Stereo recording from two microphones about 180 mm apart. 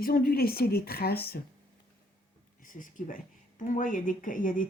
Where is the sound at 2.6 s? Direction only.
45° left (ahead or behind).